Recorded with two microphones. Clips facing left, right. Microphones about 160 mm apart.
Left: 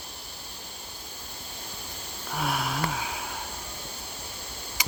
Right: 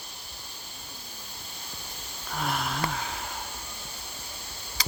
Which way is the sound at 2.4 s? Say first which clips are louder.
Left 1 dB; 5° left (ahead or behind).